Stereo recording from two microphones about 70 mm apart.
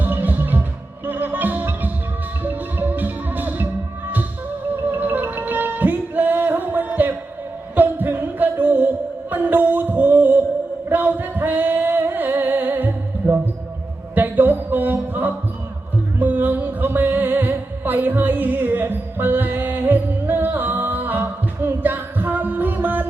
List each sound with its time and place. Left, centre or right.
0.0 s music: right
4.9 s music: right
10.8 s singing: right
13.2 s music: right